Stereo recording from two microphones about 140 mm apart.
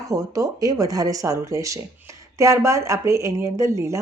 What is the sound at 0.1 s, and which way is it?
Speech, 25° right (ahead or behind).